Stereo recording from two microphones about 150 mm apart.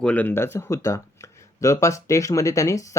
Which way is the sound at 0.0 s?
10° left (ahead or behind).